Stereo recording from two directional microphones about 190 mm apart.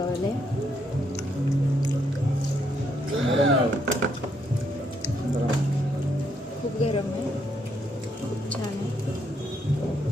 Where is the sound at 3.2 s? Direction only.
90° right.